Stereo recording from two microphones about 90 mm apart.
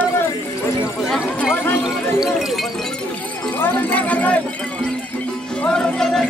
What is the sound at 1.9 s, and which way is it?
Speech, 5° right (ahead or behind).